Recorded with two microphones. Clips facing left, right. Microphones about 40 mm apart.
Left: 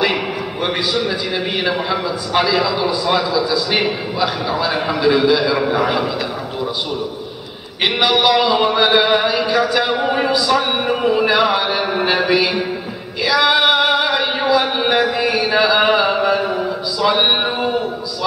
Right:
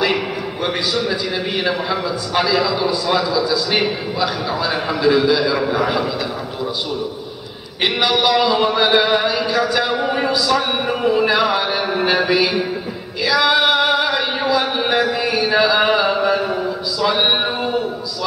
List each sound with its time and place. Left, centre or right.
0.0 s a man's voice: centre
7.8 s a man's voice: centre
13.2 s a sound: centre